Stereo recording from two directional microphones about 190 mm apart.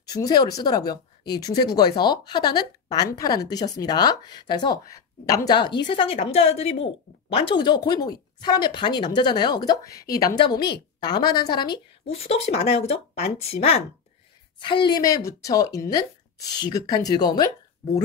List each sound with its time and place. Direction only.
0.1 s speech: 20° left (ahead or behind)